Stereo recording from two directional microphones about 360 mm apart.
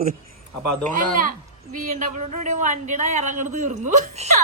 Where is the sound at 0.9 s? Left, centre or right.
Right.